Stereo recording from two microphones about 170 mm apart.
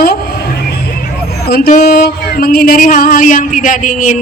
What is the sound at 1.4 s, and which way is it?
Speech, 65° left (ahead or behind).